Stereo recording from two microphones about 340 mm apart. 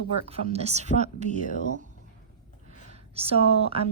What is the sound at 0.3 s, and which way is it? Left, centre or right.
A woman's voice, centre.